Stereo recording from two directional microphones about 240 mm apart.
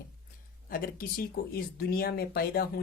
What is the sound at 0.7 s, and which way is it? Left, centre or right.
Speech, left.